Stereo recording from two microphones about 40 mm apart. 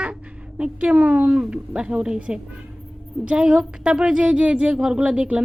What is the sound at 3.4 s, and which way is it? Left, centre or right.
A woman's voice, centre.